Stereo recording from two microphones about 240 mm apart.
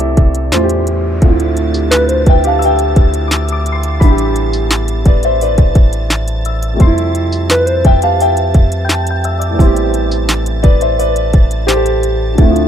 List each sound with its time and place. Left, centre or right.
0.0 s music: centre